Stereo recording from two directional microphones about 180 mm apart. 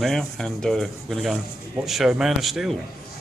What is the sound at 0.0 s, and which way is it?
Speech, 5° left (ahead or behind).